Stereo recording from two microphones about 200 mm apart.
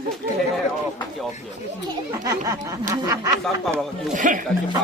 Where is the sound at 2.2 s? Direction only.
20° right (ahead or behind).